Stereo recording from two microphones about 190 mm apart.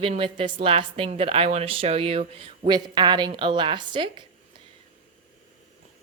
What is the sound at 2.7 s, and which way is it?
A woman's voice, 25° right (ahead or behind).